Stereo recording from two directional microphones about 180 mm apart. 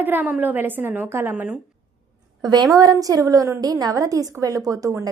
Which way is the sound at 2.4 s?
25° right (ahead or behind).